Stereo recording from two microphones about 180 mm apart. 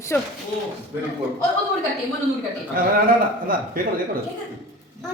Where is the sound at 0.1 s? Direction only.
10° left (ahead or behind).